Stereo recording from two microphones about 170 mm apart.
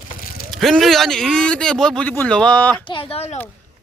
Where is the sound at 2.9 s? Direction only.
35° left (ahead or behind).